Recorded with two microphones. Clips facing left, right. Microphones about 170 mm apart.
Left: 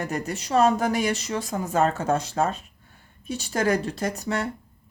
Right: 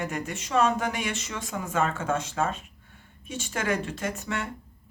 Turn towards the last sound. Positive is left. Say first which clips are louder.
# left 5 dB
turn(degrees=40)  # may be behind; listen again after turning